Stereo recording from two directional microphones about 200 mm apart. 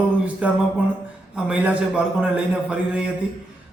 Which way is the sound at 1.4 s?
5° right (ahead or behind).